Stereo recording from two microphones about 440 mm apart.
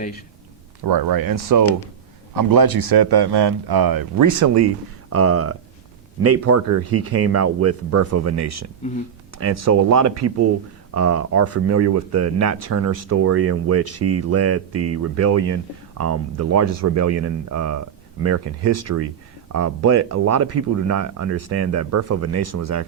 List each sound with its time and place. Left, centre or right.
0.9 s a man's voice: right
5.0 s speech: right